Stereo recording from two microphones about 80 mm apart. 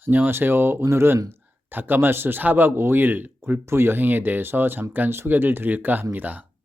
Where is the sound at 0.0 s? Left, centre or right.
Right.